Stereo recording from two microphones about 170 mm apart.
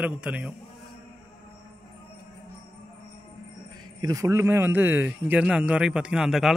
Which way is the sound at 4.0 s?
20° right (ahead or behind).